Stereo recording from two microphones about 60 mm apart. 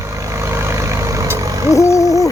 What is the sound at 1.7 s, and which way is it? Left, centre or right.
Hoot, left.